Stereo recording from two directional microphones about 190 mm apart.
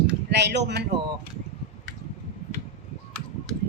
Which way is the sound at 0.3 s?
65° right (ahead or behind).